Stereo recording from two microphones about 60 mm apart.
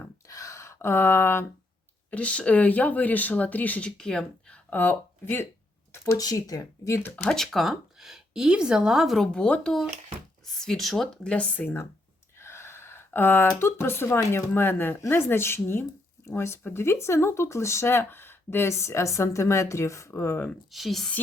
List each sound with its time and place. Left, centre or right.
0.3 s a sound: left
2.0 s speech: left
3.9 s speech: centre
4.7 s speech: left
6.1 s speech: left
7.3 s speech: centre
9.1 s a woman's voice: centre
11.6 s speech: left
12.4 s gasp: left
13.6 s speech: left
20.7 s a woman's voice: centre